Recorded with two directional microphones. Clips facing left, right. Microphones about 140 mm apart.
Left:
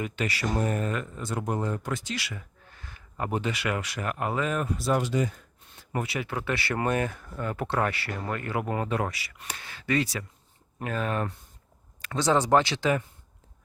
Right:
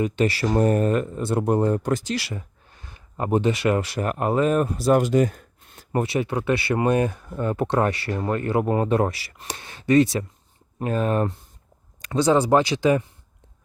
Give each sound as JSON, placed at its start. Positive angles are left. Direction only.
{"t": 0.0, "sound": "speech", "side_deg": -30}
{"t": 2.8, "sound": "a sound", "side_deg": -25}
{"t": 3.4, "sound": "speech", "side_deg": -25}
{"t": 6.0, "sound": "speech", "side_deg": -30}
{"t": 12.0, "sound": "speech", "side_deg": -15}